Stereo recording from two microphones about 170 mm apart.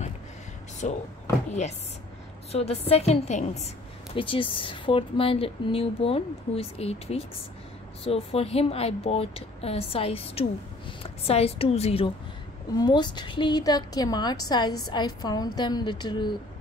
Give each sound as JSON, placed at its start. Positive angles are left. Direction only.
{"t": 0.8, "sound": "speech", "side_deg": 45}
{"t": 2.5, "sound": "a woman's voice", "side_deg": 35}
{"t": 12.7, "sound": "a woman's voice", "side_deg": 25}